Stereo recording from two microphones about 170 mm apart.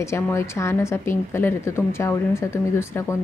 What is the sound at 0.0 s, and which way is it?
Speech, 15° left (ahead or behind).